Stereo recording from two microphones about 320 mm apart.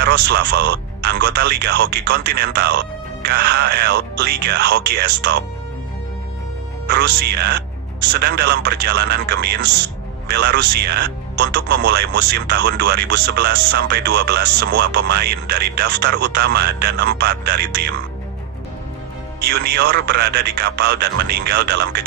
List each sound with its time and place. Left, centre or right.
0.0 s speech: right
6.9 s speech: right
19.5 s speech: right